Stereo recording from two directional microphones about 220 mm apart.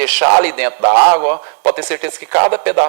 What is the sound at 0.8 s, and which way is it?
Speech, 25° right (ahead or behind).